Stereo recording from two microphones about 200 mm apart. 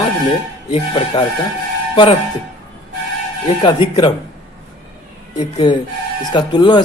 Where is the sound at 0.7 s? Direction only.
30° left (ahead or behind).